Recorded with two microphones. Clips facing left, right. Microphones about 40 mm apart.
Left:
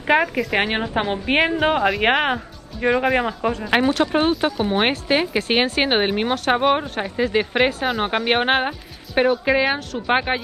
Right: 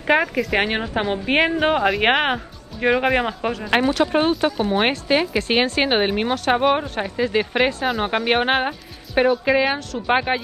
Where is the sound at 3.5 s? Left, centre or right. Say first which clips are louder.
Left 1 dB; centre.